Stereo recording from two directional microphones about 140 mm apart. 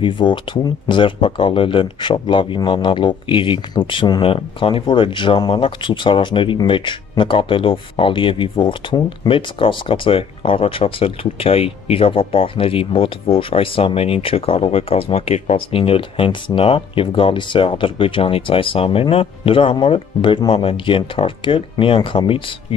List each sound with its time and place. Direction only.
0.0 s speech: 35° left (ahead or behind)